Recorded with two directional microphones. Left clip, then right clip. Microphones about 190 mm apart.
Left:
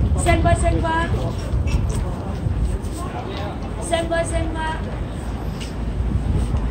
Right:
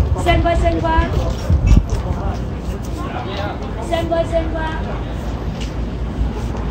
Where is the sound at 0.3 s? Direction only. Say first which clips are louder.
Right 3 dB; 45° left (ahead or behind).